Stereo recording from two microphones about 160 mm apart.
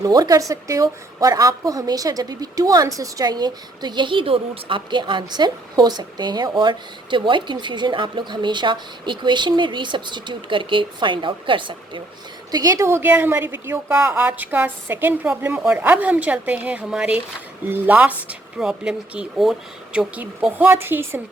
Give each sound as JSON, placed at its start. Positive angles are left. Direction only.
{"t": 0.0, "sound": "a woman's voice", "side_deg": -25}